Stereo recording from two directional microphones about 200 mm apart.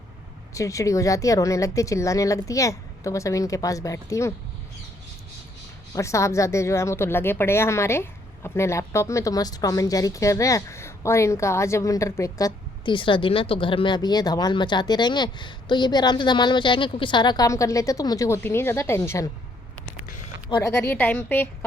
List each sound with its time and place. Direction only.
0.5 s speech: 15° left (ahead or behind)
5.9 s speech: 15° left (ahead or behind)
20.5 s speech: 15° left (ahead or behind)